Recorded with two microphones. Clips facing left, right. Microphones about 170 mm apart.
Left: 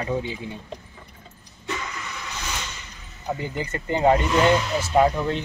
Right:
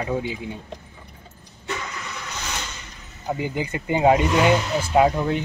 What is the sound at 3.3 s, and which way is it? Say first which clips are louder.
Speech: right 3 dB; 10° right (ahead or behind).